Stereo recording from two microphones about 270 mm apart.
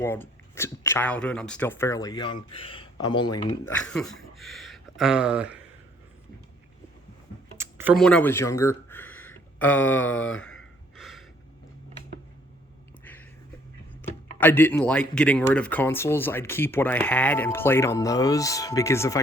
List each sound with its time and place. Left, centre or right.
0.0 s speech: centre
7.6 s a sound: centre
14.3 s speech: centre